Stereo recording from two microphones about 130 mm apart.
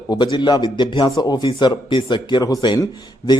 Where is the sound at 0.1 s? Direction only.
35° left (ahead or behind).